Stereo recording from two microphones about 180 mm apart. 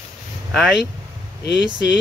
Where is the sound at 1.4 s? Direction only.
70° left (ahead or behind).